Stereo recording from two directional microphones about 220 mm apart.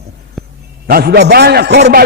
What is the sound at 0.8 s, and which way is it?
A man's voice, 45° right (ahead or behind).